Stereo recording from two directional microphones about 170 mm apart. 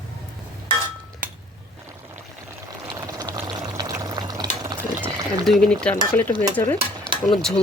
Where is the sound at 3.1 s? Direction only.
20° right (ahead or behind).